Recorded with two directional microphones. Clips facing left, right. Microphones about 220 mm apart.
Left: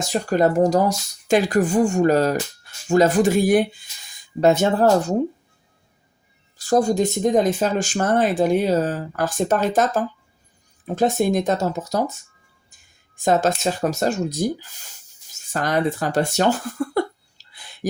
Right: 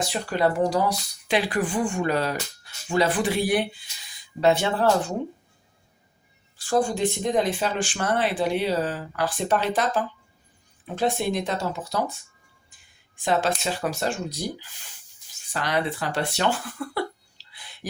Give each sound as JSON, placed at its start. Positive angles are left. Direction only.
{"t": 0.0, "sound": "speech", "side_deg": 45}
{"t": 6.6, "sound": "speech", "side_deg": 40}